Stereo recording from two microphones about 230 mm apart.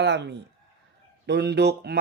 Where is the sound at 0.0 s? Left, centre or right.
Right.